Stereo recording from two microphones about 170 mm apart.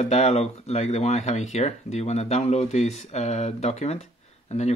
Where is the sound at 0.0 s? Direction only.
40° left (ahead or behind).